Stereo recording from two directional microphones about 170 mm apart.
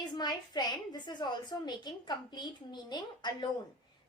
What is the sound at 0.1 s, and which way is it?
A woman's voice, 25° left (ahead or behind).